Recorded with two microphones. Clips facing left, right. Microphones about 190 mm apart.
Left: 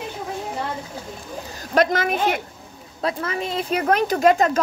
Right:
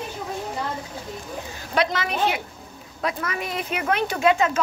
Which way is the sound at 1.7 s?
45° left (ahead or behind).